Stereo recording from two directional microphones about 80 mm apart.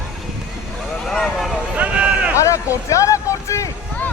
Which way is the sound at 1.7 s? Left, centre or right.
Centre.